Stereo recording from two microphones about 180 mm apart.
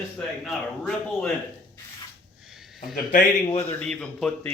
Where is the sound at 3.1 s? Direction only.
35° left (ahead or behind).